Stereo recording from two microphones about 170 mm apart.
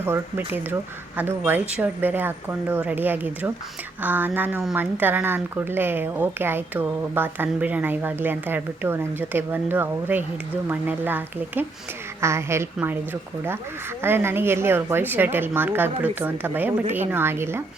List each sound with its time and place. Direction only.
0.0 s speech: 15° right (ahead or behind)
14.0 s speech: 15° right (ahead or behind)